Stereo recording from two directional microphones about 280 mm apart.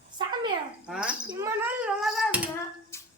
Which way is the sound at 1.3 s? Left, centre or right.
Centre.